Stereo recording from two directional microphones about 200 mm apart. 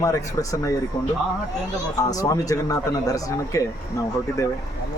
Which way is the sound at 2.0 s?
15° left (ahead or behind).